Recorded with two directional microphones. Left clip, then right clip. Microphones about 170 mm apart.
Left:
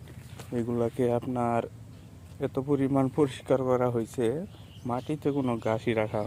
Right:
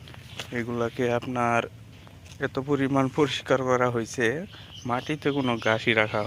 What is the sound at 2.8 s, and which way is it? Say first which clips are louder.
Speech: right 3 dB; 15° left (ahead or behind).